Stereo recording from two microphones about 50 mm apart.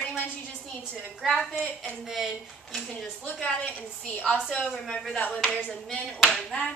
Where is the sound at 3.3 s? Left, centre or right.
Centre.